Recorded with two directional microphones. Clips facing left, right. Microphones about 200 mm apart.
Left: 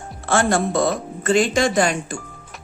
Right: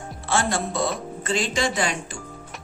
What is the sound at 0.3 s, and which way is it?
Speech, 50° left (ahead or behind).